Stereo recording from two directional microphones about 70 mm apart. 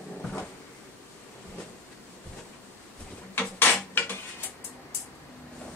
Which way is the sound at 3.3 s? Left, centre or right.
Left.